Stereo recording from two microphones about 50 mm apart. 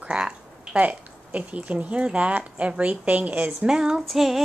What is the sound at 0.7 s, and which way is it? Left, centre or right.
Speech, right.